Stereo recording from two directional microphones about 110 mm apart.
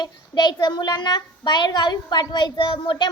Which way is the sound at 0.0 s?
40° left (ahead or behind).